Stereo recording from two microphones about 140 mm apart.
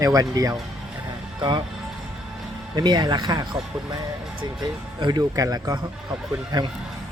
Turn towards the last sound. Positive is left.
turn(degrees=-30)  # may be behind; listen again after turning